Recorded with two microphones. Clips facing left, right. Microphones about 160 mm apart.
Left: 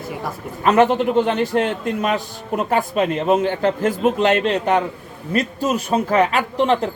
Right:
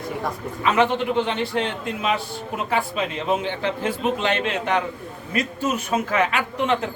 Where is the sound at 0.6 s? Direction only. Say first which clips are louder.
Left 5 dB; 45° left (ahead or behind).